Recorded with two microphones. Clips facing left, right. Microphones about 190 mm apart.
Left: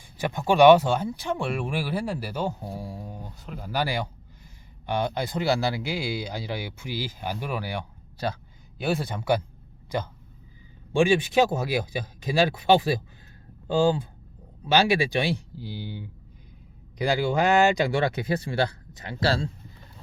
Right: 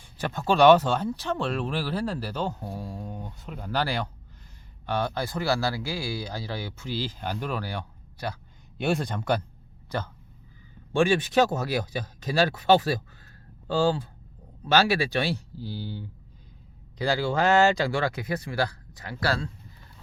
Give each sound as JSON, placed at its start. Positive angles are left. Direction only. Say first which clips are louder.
{"t": 0.0, "sound": "speech", "louder": "left 2 dB", "side_deg": 15}
{"t": 8.8, "sound": "speech", "louder": "right 1 dB", "side_deg": 5}